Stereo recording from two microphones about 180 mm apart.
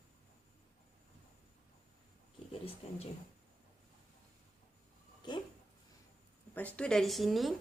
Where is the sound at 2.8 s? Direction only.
35° left (ahead or behind).